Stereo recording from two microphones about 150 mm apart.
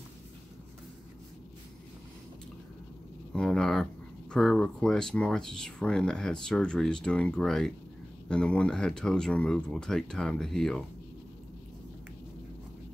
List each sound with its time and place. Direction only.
3.3 s speech: 5° left (ahead or behind)